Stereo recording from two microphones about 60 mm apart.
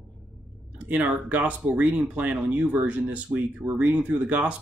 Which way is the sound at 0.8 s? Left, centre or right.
Right.